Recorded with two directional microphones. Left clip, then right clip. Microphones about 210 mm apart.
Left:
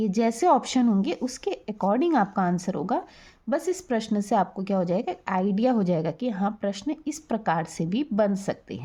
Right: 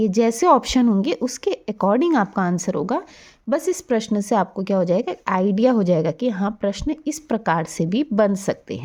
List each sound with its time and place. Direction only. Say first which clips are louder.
0.0 s a woman's voice: right 6 dB; 30° right (ahead or behind)